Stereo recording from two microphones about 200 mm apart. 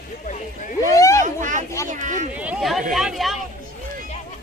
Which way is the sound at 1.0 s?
15° left (ahead or behind).